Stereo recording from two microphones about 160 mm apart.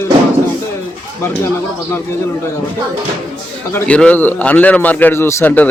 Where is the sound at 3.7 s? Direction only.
10° left (ahead or behind).